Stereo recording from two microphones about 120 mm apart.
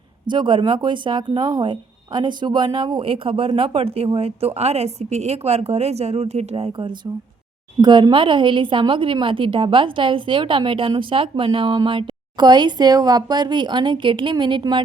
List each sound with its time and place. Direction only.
0.3 s a woman's voice: 40° right (ahead or behind); by 6.7 s 65° right (ahead or behind)
6.7 s a woman's voice: 40° right (ahead or behind)